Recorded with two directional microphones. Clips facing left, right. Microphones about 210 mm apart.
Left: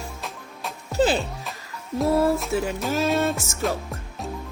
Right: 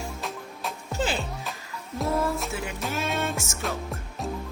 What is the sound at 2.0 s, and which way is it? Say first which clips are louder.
Music: left 6 dB; centre (ahead or behind).